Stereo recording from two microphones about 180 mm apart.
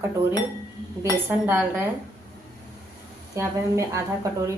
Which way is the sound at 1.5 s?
10° right (ahead or behind).